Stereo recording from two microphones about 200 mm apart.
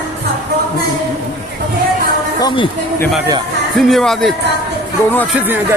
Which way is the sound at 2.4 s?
25° left (ahead or behind).